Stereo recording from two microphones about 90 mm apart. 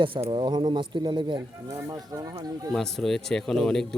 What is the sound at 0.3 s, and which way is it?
Speech, 60° right (ahead or behind).